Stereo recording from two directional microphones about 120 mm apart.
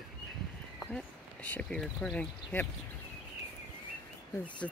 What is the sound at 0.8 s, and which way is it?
Speech, 10° left (ahead or behind).